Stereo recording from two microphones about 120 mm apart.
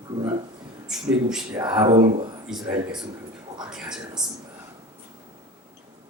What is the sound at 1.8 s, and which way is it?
Speech, 45° right (ahead or behind).